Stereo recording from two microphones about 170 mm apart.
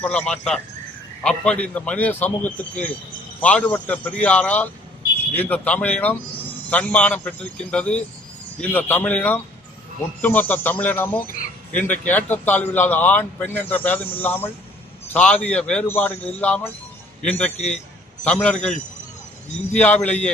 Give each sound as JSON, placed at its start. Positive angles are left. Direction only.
{"t": 0.0, "sound": "a man's voice", "side_deg": 5}
{"t": 19.7, "sound": "a man's voice", "side_deg": 10}